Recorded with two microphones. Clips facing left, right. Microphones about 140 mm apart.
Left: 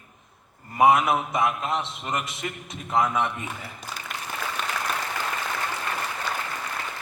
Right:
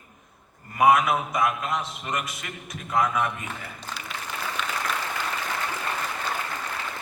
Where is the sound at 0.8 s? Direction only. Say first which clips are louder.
Left 1 dB; 25° left (ahead or behind).